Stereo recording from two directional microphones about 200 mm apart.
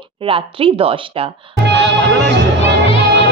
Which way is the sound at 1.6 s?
55° right (ahead or behind).